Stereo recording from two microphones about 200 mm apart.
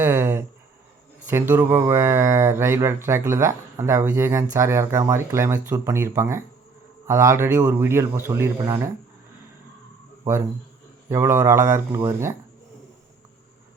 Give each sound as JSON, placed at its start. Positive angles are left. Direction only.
{"t": 0.0, "sound": "a sound", "side_deg": -10}
{"t": 1.3, "sound": "speech", "side_deg": -10}
{"t": 11.1, "sound": "speech", "side_deg": -15}